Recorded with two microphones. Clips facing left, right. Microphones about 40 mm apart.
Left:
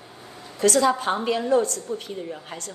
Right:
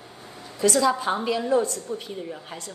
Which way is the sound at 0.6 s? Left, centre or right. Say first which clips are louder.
Left 1 dB; left.